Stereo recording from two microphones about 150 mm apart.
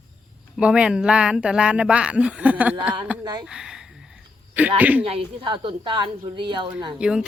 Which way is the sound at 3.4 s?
5° right (ahead or behind).